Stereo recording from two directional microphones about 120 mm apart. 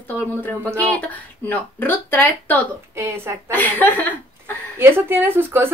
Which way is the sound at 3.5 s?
15° left (ahead or behind).